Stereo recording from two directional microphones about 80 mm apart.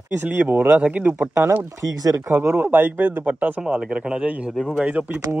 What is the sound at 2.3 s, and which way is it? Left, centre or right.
A man's voice, right.